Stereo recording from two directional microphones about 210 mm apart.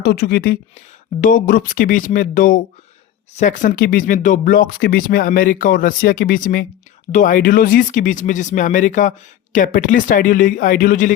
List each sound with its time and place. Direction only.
0.0 s a woman's voice: 50° left (ahead or behind)